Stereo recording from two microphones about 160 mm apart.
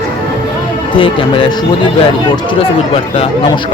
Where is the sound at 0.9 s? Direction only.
30° left (ahead or behind).